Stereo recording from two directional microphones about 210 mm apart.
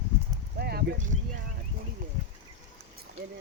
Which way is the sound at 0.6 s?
50° right (ahead or behind).